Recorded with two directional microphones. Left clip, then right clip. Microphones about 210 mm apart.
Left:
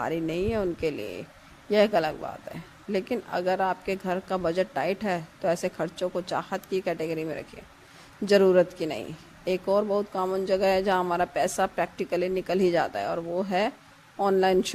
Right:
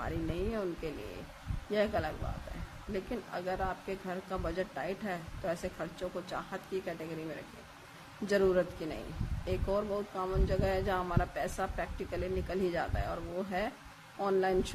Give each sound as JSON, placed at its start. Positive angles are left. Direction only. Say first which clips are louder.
{"t": 0.0, "sound": "a man's voice", "louder": "left 9 dB", "side_deg": 45}